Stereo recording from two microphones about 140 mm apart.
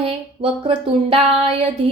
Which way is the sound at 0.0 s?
40° right (ahead or behind).